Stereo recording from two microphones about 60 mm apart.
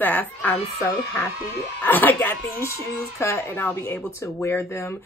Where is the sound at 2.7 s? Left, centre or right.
Left.